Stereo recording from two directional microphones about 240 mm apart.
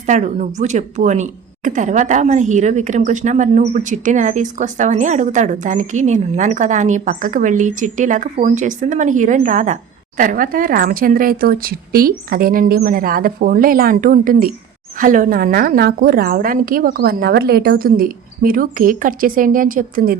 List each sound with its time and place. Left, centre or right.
0.0 s speech: right